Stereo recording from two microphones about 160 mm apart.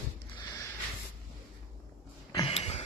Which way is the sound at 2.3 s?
35° left (ahead or behind).